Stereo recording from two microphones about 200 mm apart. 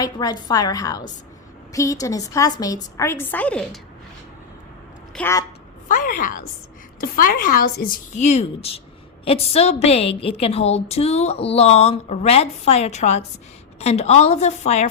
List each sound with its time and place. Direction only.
0.0 s a woman's voice: 20° left (ahead or behind)
5.1 s a woman's voice: 15° left (ahead or behind)
5.9 s a woman's voice: 40° left (ahead or behind)